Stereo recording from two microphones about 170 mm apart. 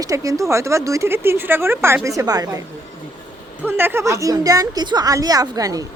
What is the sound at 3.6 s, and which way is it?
Speech, 15° right (ahead or behind).